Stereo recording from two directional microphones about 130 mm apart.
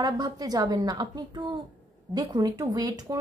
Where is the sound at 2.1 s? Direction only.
30° right (ahead or behind).